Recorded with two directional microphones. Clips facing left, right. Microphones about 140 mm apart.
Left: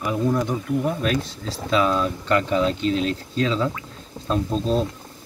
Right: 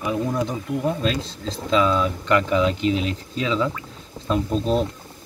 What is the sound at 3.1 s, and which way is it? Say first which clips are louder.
Speech: left 2 dB; 40° left (ahead or behind).